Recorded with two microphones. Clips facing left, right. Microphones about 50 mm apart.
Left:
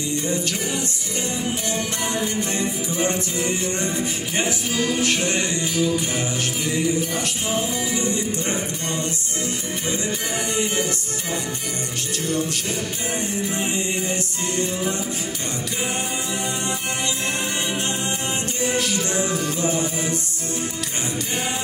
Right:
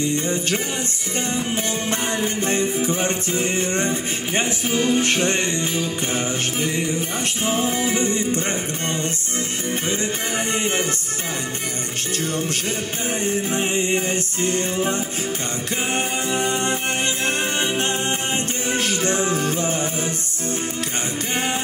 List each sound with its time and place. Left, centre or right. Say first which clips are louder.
2.2 s music: right 3 dB; right
13.6 s music: right 3 dB; right
18.7 s music: right 3 dB; right